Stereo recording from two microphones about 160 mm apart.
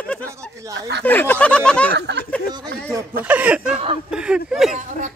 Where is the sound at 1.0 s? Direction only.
10° left (ahead or behind).